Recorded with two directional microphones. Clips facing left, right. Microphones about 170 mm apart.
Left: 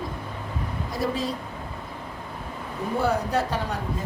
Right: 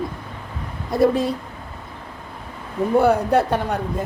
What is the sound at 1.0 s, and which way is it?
Speech, 55° right (ahead or behind).